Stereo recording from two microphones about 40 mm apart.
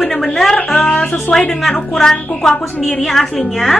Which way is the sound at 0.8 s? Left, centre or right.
Left.